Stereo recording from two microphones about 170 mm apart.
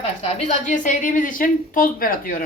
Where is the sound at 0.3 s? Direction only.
40° left (ahead or behind).